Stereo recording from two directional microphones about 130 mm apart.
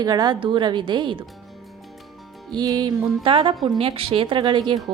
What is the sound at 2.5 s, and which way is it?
A woman's voice, 35° right (ahead or behind).